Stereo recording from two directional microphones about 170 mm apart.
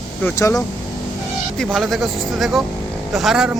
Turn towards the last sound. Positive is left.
turn(degrees=0)  # may be behind; listen again after turning